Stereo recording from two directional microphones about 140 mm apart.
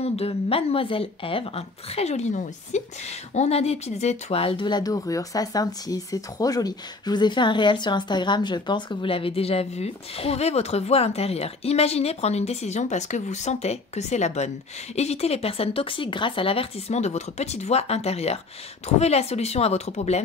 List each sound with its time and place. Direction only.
0.0 s speech: 45° left (ahead or behind)